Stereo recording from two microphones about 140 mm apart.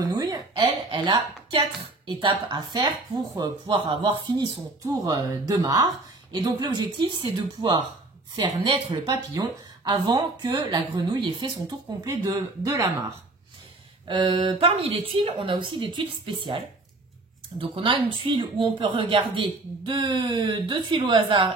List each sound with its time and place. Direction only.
0.0 s a sound: 25° right (ahead or behind)
2.0 s a woman's voice: 35° right (ahead or behind)
14.0 s a woman's voice: 35° right (ahead or behind)